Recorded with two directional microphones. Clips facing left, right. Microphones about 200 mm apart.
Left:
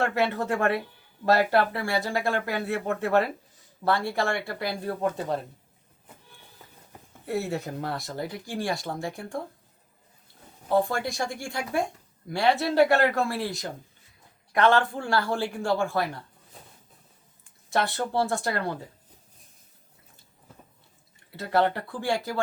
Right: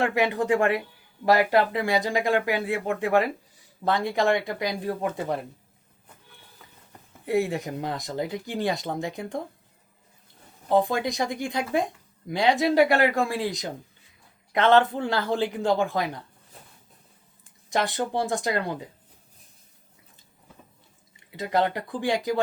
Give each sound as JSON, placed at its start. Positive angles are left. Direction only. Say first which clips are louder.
{"t": 0.0, "sound": "speech", "louder": "right 2 dB", "side_deg": -15}
{"t": 7.3, "sound": "speech", "louder": "right 4 dB", "side_deg": -15}
{"t": 10.7, "sound": "speech", "louder": "right 2 dB", "side_deg": -20}
{"t": 17.7, "sound": "speech", "louder": "right 1 dB", "side_deg": -15}
{"t": 21.2, "sound": "speech", "louder": "even", "side_deg": -15}